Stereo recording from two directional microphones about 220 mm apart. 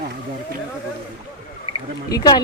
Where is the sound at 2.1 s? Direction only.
20° left (ahead or behind).